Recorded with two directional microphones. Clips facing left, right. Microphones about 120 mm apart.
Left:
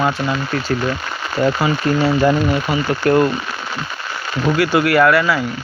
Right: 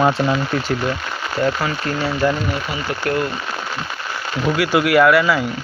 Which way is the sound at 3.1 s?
30° left (ahead or behind).